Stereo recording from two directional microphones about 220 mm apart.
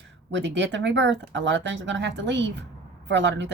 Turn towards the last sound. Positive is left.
turn(degrees=-55)  # may be behind; listen again after turning